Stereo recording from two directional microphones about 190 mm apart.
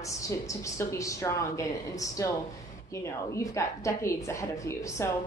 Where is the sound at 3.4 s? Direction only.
15° left (ahead or behind).